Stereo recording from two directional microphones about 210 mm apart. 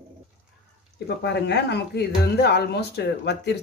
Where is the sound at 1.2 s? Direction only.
55° left (ahead or behind).